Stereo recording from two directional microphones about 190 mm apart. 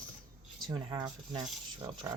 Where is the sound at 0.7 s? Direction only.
25° right (ahead or behind).